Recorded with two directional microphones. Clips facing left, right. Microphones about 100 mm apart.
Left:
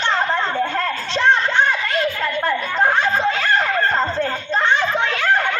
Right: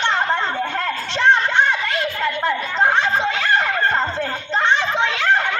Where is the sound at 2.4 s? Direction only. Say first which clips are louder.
Left 1 dB; 20° right (ahead or behind).